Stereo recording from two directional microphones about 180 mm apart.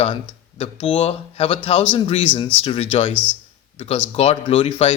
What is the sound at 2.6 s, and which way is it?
Speech, 35° left (ahead or behind).